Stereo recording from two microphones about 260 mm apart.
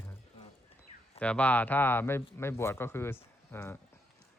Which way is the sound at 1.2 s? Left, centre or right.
Centre.